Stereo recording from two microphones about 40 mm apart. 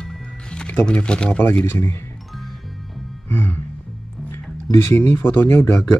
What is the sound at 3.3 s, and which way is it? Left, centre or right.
Music, left.